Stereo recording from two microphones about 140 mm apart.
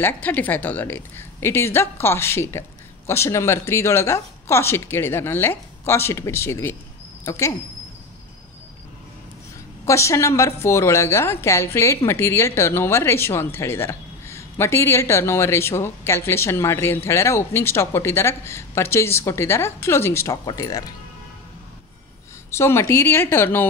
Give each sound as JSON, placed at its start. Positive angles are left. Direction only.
{"t": 0.0, "sound": "a woman's voice", "side_deg": 10}
{"t": 9.8, "sound": "a woman's voice", "side_deg": 20}
{"t": 22.5, "sound": "a woman's voice", "side_deg": 20}